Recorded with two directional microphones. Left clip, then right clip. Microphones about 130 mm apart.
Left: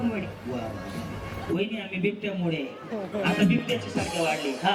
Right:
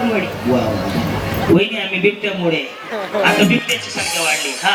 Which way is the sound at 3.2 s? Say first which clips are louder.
Right 12 dB; 30° right (ahead or behind).